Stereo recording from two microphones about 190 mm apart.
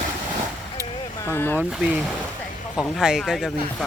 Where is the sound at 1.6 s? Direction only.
5° right (ahead or behind).